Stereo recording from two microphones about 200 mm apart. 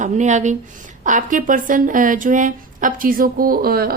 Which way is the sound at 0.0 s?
35° right (ahead or behind).